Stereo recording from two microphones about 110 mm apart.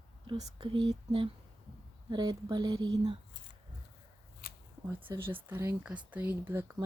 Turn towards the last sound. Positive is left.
turn(degrees=-15)  # may be behind; listen again after turning